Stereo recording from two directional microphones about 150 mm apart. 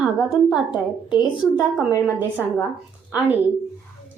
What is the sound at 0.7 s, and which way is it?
Speech, 30° left (ahead or behind).